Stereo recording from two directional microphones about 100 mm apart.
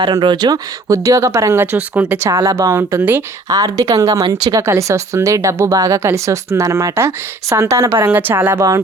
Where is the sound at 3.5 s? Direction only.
35° right (ahead or behind).